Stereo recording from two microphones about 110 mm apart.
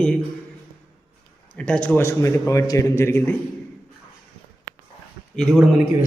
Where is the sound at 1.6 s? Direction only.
10° left (ahead or behind).